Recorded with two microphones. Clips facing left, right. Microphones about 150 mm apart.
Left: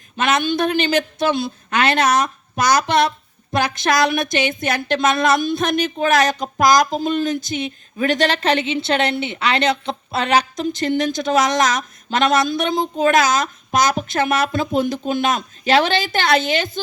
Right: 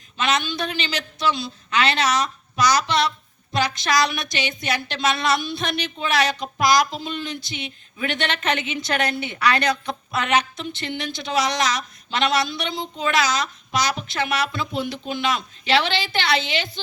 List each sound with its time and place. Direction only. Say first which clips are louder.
0.2 s a woman's voice: left 5 dB; 50° left (ahead or behind)